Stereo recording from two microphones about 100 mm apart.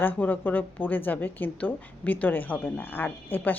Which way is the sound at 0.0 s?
20° left (ahead or behind).